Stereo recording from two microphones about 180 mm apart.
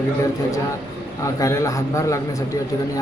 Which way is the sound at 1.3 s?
20° left (ahead or behind).